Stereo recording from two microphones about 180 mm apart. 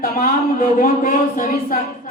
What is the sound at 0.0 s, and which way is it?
Speech, 50° left (ahead or behind).